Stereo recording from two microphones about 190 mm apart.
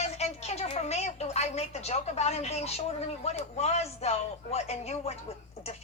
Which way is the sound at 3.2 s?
35° left (ahead or behind).